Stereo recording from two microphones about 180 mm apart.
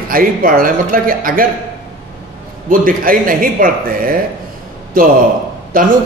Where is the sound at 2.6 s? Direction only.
50° right (ahead or behind).